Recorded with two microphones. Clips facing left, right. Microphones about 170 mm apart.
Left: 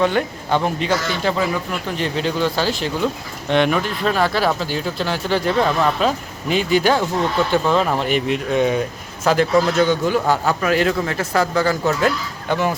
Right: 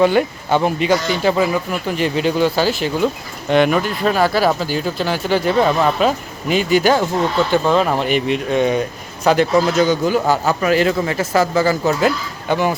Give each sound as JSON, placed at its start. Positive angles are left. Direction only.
{"t": 0.0, "sound": "speech", "side_deg": -5}